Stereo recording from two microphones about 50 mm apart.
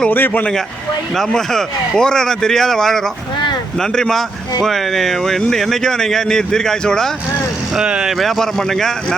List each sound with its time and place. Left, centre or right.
0.1 s a man's voice: left
1.3 s speech: centre
7.8 s speech: centre
8.2 s speech: centre